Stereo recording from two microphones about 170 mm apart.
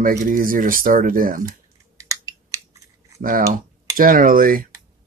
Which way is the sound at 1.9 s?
20° right (ahead or behind).